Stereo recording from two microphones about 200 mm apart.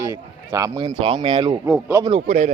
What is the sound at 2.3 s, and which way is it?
Speech, 35° right (ahead or behind).